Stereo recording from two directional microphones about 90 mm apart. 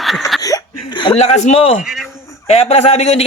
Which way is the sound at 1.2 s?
90° left.